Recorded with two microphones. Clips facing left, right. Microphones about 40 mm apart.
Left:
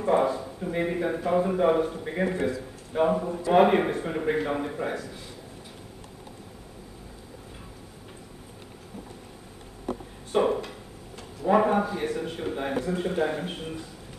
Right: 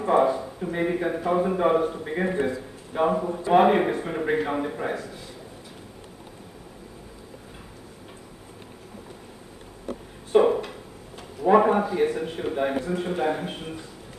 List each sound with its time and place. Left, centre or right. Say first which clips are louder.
0.0 s a man's voice: right 3 dB; centre
10.3 s a sound: right 5 dB; centre
11.4 s a man's voice: right 3 dB; centre